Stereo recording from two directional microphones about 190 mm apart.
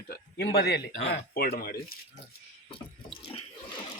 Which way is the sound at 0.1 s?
55° left (ahead or behind).